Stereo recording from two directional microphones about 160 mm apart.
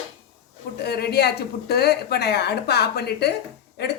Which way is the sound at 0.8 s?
85° left.